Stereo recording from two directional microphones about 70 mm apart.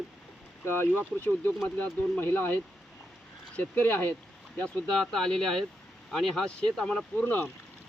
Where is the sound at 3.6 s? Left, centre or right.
Left.